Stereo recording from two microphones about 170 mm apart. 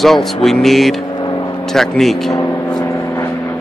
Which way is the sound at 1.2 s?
25° left (ahead or behind).